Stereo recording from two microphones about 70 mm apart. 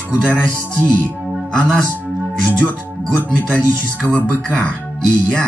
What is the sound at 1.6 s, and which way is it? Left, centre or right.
Speech, centre.